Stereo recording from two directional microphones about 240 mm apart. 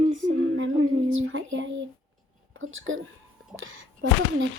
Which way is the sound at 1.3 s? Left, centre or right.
Right.